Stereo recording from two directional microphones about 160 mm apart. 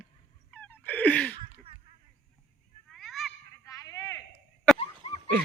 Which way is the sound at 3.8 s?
20° left (ahead or behind).